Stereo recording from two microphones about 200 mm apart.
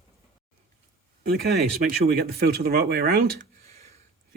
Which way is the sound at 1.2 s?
50° right (ahead or behind).